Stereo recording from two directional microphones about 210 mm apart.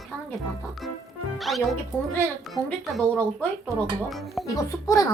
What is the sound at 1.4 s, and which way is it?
Speech, centre (ahead or behind).